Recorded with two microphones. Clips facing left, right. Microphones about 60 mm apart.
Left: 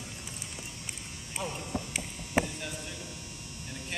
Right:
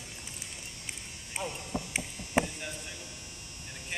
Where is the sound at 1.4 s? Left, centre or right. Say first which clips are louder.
Left 1 dB; centre.